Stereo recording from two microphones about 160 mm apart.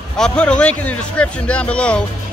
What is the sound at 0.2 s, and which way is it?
Speech, 5° left (ahead or behind).